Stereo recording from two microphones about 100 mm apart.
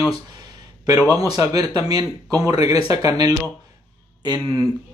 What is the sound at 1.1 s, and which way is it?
A man's voice, 40° right (ahead or behind).